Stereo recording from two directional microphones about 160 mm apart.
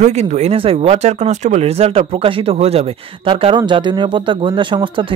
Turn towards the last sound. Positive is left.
turn(degrees=-30)  # may be behind; listen again after turning